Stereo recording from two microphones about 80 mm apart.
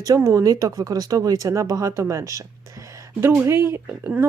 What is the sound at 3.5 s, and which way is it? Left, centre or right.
Speech, right.